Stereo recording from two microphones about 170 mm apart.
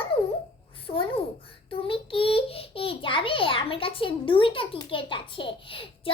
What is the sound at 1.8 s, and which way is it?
A child's voice, 30° left (ahead or behind).